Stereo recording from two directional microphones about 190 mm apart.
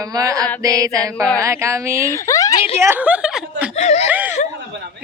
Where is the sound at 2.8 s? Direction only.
10° right (ahead or behind).